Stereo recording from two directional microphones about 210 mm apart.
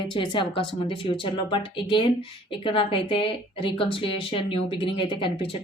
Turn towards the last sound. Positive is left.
turn(degrees=25)  # may be behind; listen again after turning